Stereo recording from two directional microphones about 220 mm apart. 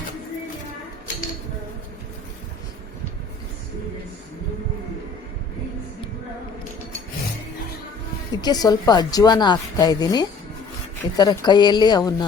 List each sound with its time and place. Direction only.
8.3 s a woman's voice: 20° left (ahead or behind)